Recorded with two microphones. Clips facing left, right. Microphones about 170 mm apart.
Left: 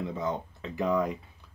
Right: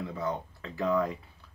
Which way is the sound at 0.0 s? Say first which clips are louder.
Left 2 dB; 20° left (ahead or behind).